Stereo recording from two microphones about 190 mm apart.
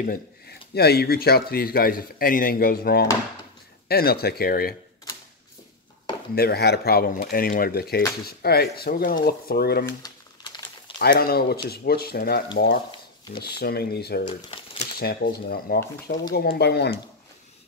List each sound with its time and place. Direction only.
0.0 s speech: 50° left (ahead or behind)
6.3 s speech: 55° left (ahead or behind)
9.8 s crumpling: 20° left (ahead or behind)
11.0 s speech: 50° left (ahead or behind)
14.3 s crumpling: 30° left (ahead or behind)
15.0 s speech: 55° left (ahead or behind)